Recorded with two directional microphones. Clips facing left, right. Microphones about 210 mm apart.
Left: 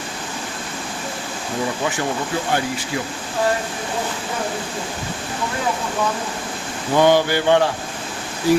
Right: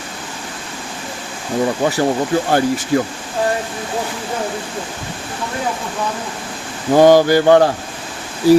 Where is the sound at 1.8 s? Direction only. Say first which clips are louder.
Right 7 dB; 35° right (ahead or behind).